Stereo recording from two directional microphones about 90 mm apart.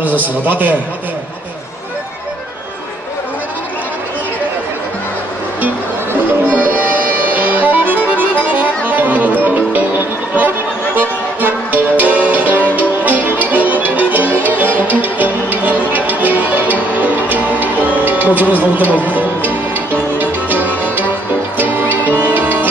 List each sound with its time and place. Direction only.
0.0 s a man's voice: 20° right (ahead or behind)
6.4 s music: 20° right (ahead or behind)